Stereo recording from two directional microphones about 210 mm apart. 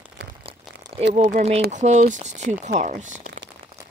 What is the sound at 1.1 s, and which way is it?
Speech, 30° right (ahead or behind).